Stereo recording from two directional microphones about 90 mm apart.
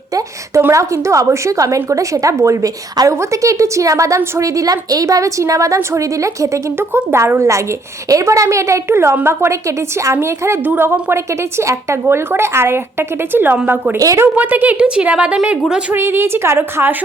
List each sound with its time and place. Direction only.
0.1 s a woman's voice: 40° right (ahead or behind); by 13.6 s 20° right (ahead or behind)
14.0 s a woman's voice: 40° right (ahead or behind)
14.3 s a woman's voice: 20° right (ahead or behind)
15.9 s a woman's voice: 25° right (ahead or behind)